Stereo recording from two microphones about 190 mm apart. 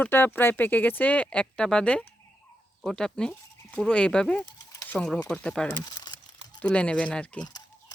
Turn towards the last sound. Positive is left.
turn(degrees=20)  # may be behind; listen again after turning